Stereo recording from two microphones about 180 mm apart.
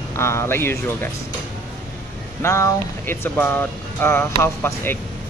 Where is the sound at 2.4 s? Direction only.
15° left (ahead or behind).